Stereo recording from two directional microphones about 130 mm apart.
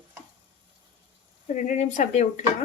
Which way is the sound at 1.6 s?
70° left (ahead or behind).